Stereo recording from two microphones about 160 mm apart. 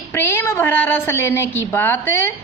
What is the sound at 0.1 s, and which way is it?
A woman's voice, 15° left (ahead or behind).